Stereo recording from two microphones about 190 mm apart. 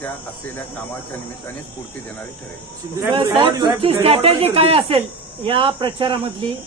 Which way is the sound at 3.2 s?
25° right (ahead or behind).